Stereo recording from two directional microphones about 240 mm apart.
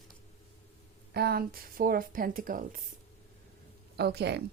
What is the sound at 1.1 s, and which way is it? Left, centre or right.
A woman's voice, right.